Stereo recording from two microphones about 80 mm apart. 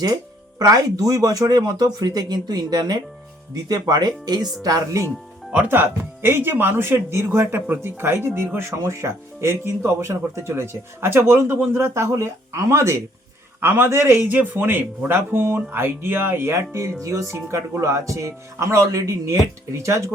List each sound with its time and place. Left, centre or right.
0.6 s speech: right
4.6 s speech: right
5.5 s speech: centre
5.8 s a man's voice: right
11.9 s a man's voice: right